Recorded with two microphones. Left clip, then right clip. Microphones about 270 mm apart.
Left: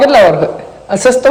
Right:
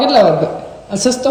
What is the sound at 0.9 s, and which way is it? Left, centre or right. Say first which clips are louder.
Speech: left 7 dB; centre.